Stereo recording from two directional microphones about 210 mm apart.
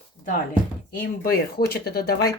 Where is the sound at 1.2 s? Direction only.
45° left (ahead or behind).